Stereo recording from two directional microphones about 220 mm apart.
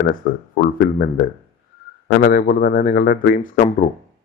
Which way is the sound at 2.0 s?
40° left (ahead or behind).